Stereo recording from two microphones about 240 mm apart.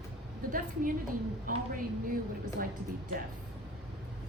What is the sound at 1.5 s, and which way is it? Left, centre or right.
Speech, right.